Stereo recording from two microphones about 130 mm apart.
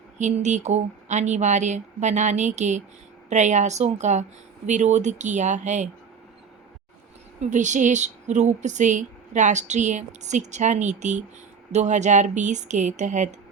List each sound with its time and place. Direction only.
0.2 s speech: 65° right (ahead or behind)
7.5 s speech: 70° right (ahead or behind)